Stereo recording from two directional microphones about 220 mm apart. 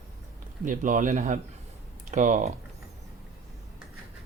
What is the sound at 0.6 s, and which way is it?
Speech, 35° right (ahead or behind).